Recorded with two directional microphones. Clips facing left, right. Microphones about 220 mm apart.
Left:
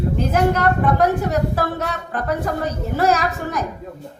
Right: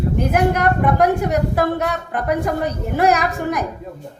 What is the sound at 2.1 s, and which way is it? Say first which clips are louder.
A woman's voice: right 2 dB; 15° right (ahead or behind).